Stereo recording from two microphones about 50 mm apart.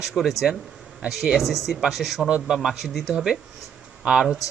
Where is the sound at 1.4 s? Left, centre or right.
Centre.